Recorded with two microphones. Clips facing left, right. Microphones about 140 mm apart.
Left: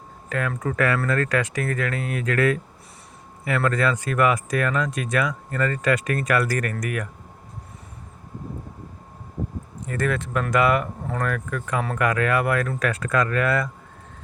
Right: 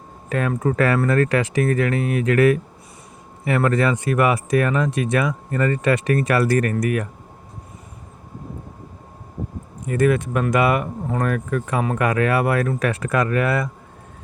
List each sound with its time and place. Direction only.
0.3 s speech: 25° right (ahead or behind)
9.8 s speech: 15° right (ahead or behind)